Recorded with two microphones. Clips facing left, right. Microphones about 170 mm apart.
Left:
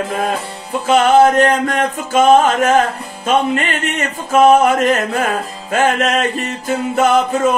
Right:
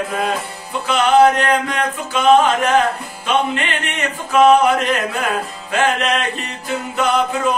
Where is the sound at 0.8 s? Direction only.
45° left (ahead or behind).